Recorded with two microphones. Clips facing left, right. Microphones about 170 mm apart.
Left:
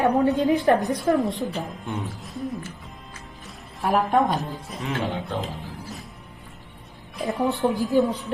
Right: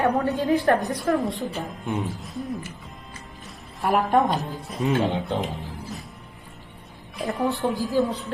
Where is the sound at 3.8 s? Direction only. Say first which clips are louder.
Even; centre (ahead or behind).